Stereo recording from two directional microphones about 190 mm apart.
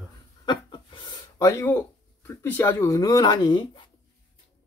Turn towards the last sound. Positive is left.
turn(degrees=25)  # may be behind; listen again after turning